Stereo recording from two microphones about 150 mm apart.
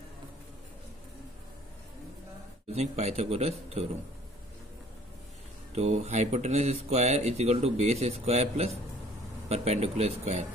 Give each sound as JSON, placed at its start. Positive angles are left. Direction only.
{"t": 2.7, "sound": "speech", "side_deg": -45}
{"t": 5.8, "sound": "speech", "side_deg": -50}